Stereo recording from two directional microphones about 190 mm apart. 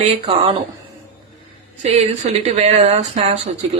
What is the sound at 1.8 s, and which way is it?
Speech, 35° right (ahead or behind).